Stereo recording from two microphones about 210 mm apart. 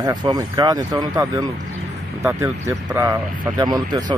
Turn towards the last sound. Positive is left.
turn(degrees=-20)  # may be behind; listen again after turning